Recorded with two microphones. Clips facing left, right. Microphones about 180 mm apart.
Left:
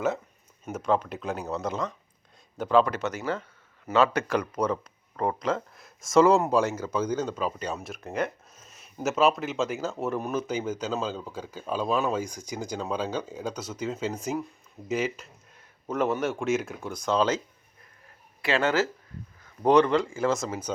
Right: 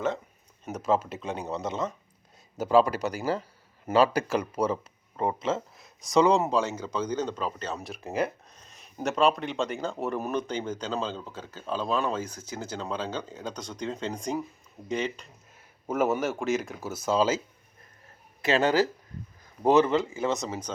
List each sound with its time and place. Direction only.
0.6 s speech: centre (ahead or behind)
2.9 s speech: 35° right (ahead or behind)
4.5 s speech: 5° right (ahead or behind)
8.5 s a sound: 5° left (ahead or behind)
9.0 s speech: 5° left (ahead or behind)
15.9 s speech: 10° right (ahead or behind)
18.4 s speech: 15° right (ahead or behind); by 20.7 s centre (ahead or behind)